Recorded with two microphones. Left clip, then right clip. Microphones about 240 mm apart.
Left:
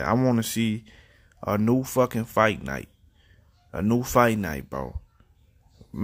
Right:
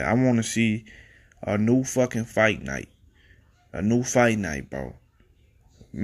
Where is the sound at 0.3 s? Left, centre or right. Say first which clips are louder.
Right 2 dB; centre.